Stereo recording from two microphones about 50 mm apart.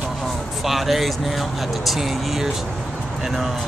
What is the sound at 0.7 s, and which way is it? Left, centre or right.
Speech, centre.